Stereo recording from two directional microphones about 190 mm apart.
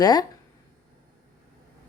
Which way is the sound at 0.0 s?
20° left (ahead or behind).